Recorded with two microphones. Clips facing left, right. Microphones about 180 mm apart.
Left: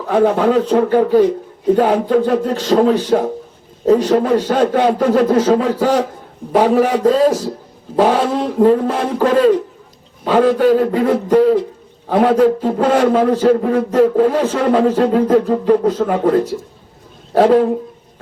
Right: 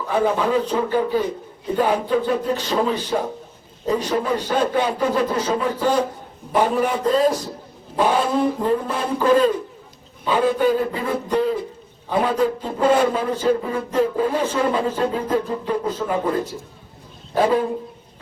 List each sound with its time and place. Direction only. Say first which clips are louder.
0.0 s a man's voice: left 7 dB; 60° left (ahead or behind)
2.5 s a man's voice: left 8 dB; 75° left (ahead or behind); by 7.3 s 90° left
7.9 s a man's voice: left 5 dB; 80° left